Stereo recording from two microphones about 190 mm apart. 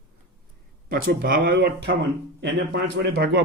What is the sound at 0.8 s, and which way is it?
A man's voice, 50° right (ahead or behind).